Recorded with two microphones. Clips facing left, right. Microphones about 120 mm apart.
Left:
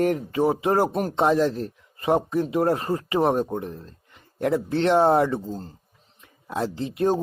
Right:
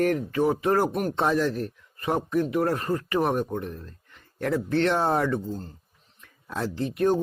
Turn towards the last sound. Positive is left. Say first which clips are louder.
# even
turn(degrees=20)  # may be behind; listen again after turning